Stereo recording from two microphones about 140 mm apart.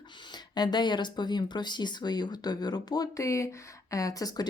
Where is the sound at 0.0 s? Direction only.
35° left (ahead or behind).